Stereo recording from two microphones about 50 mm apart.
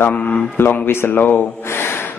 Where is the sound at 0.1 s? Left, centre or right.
Left.